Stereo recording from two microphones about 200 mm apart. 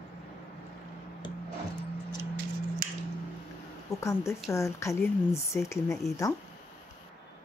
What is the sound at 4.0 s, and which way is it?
A woman's voice, 15° left (ahead or behind).